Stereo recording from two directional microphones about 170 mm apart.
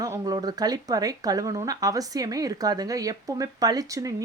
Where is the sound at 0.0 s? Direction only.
20° right (ahead or behind).